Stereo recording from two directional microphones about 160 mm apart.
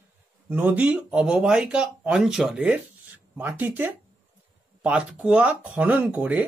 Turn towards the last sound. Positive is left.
turn(degrees=-10)  # may be behind; listen again after turning